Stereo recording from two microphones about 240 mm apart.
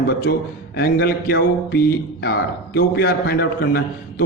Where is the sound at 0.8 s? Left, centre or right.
Left.